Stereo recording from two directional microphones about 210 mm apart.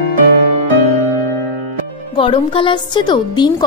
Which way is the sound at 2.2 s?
25° left (ahead or behind).